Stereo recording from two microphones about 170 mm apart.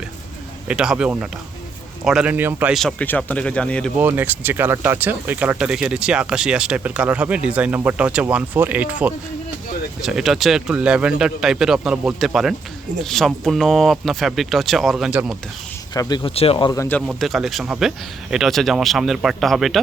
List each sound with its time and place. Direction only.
0.7 s speech: 5° right (ahead or behind)
2.7 s speech: 5° left (ahead or behind)
3.9 s speech: 10° right (ahead or behind)
16.0 s speech: 25° left (ahead or behind)
17.1 s speech: centre (ahead or behind)